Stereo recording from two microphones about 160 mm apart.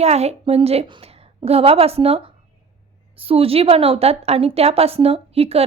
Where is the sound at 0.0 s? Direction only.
40° right (ahead or behind).